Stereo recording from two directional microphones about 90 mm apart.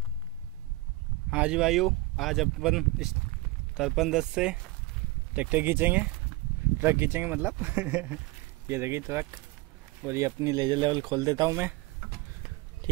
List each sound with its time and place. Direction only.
1.3 s speech: 10° right (ahead or behind); by 10.5 s 30° right (ahead or behind)
10.5 s speech: 50° right (ahead or behind)
12.8 s a sound: 50° right (ahead or behind)